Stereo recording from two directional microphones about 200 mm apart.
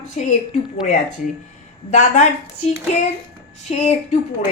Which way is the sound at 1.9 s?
35° left (ahead or behind).